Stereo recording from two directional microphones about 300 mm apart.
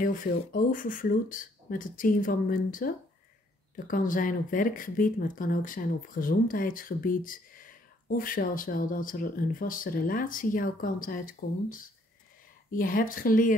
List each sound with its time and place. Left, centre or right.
0.0 s speech: left